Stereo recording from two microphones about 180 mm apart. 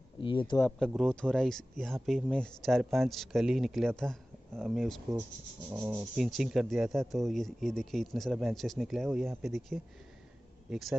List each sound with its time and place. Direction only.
0.2 s speech: 25° left (ahead or behind)
0.6 s speech: 5° left (ahead or behind)
5.7 s rub: 15° right (ahead or behind)
6.1 s speech: centre (ahead or behind)